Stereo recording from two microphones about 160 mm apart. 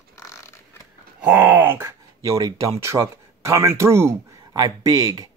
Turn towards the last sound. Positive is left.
turn(degrees=-25)  # may be behind; listen again after turning